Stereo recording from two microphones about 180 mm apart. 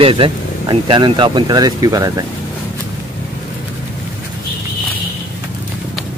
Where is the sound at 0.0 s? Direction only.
30° right (ahead or behind).